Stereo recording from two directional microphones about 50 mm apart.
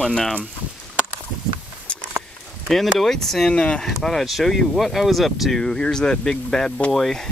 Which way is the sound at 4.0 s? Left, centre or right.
Centre.